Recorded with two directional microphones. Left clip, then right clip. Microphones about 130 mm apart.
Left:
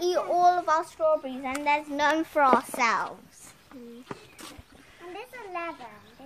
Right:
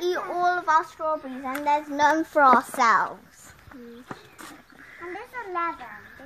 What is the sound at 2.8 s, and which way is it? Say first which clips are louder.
Speech: right 5 dB; 65° right (ahead or behind).